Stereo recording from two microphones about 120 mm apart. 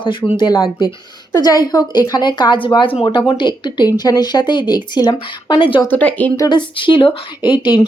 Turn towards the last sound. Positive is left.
turn(degrees=40)  # may be behind; listen again after turning